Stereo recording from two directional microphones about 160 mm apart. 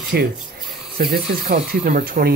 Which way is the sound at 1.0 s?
65° right (ahead or behind).